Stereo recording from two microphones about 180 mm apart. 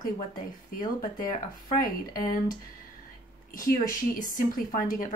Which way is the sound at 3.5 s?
50° left (ahead or behind).